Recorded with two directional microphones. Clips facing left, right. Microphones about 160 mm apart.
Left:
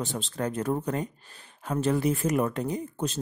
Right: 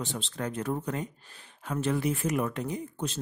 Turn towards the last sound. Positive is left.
turn(degrees=40)  # may be behind; listen again after turning